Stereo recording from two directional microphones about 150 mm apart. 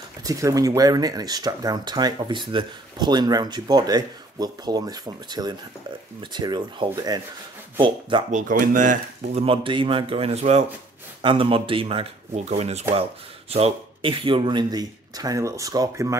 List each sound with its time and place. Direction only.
0.2 s speech: 25° right (ahead or behind)
8.3 s speech: 60° right (ahead or behind)
9.3 s speech: 40° right (ahead or behind); by 16.2 s 20° right (ahead or behind)